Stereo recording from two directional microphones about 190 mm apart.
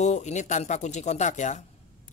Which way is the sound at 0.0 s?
35° left (ahead or behind).